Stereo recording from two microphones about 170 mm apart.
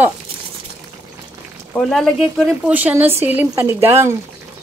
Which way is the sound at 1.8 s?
5° left (ahead or behind).